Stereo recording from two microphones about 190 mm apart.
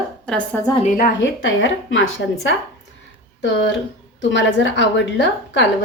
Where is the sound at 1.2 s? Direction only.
85° left.